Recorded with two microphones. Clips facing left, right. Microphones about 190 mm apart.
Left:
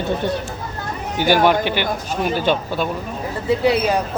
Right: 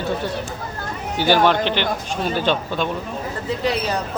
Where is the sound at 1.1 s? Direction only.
15° left (ahead or behind).